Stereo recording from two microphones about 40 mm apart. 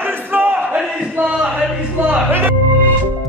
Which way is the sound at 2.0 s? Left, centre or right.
Right.